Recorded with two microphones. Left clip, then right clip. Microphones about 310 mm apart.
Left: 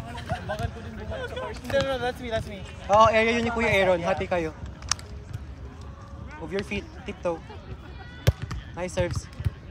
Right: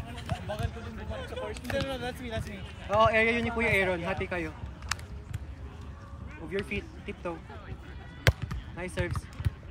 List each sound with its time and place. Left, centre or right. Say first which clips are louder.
0.1 s a sound: left 5 dB; centre
1.7 s speech: left 9 dB; centre
6.5 s speech: left 3 dB; centre
8.3 s basketball bounce: right 3 dB; centre
8.7 s speech: left 7 dB; centre